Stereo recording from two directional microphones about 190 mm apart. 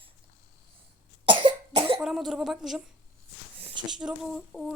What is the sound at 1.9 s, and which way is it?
Female singing, centre (ahead or behind).